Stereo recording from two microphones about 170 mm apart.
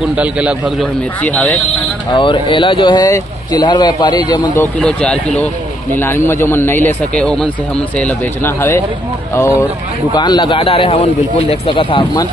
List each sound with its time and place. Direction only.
0.0 s a man's voice: 5° right (ahead or behind)
1.2 s a man's voice: 10° left (ahead or behind)
2.1 s speech: 30° left (ahead or behind)
4.6 s a man's voice: 10° left (ahead or behind)
10.1 s speech: 25° left (ahead or behind)